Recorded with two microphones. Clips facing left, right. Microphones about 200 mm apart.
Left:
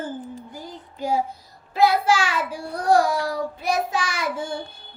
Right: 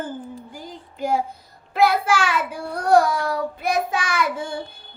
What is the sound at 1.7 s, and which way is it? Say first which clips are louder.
Child singing: even; 60° right (ahead or behind).